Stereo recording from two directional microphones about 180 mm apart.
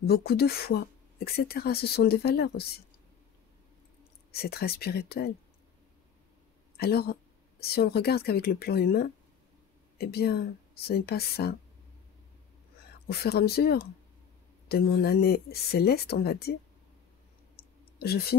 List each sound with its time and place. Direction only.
0.0 s speech: 60° left (ahead or behind)
4.3 s speech: 60° left (ahead or behind)
6.8 s speech: 60° left (ahead or behind)
13.1 s speech: 60° left (ahead or behind)
17.6 s clicking: 60° left (ahead or behind)
17.9 s speech: 60° left (ahead or behind)